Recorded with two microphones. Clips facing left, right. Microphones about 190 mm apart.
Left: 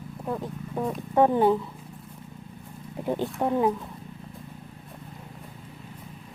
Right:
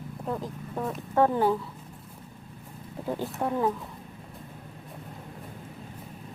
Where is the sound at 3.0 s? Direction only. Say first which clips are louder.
Left 4 dB; 20° left (ahead or behind).